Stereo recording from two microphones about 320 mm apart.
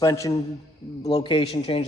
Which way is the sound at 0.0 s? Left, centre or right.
Centre.